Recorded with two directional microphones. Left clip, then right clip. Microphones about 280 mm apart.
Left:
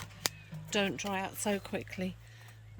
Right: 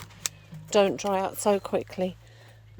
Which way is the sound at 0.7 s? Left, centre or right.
Centre.